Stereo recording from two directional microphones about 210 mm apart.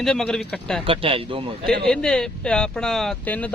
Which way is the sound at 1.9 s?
5° left (ahead or behind).